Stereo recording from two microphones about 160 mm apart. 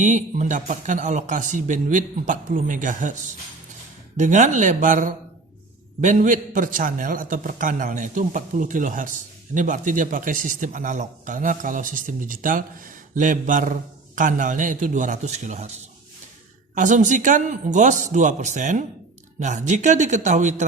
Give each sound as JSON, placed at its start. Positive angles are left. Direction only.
{"t": 0.0, "sound": "a man's voice", "side_deg": -50}
{"t": 4.2, "sound": "a man's voice", "side_deg": -50}